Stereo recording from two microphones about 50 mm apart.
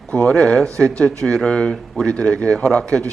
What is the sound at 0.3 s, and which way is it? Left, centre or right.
A man's voice, centre.